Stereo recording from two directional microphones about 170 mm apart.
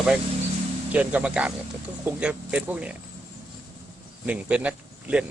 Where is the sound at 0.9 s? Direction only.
5° right (ahead or behind).